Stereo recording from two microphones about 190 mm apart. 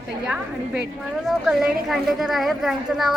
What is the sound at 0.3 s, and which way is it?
A woman's voice, 5° right (ahead or behind).